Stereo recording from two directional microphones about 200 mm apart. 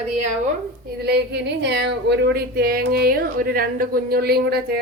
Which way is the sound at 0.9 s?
55° right (ahead or behind).